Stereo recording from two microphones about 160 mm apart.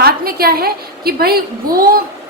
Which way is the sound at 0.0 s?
70° right (ahead or behind).